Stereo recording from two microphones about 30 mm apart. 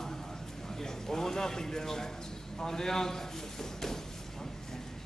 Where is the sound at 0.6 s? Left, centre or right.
Centre.